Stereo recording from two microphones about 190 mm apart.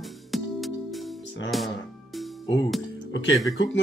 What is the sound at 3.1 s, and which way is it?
Speech, 75° left (ahead or behind).